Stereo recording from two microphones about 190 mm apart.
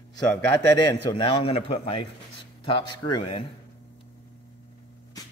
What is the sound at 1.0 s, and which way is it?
Speech, 25° left (ahead or behind).